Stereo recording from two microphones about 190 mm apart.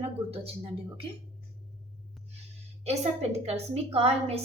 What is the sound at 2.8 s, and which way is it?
A woman's voice, 35° right (ahead or behind).